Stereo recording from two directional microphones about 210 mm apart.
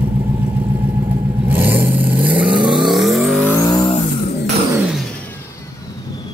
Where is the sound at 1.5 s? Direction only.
10° right (ahead or behind).